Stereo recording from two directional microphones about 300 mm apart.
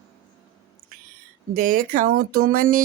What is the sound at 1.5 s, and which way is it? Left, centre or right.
Speech, right.